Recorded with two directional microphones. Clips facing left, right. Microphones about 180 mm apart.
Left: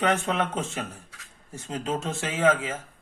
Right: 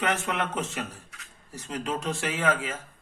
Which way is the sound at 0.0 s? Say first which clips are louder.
Left 3 dB; 30° left (ahead or behind).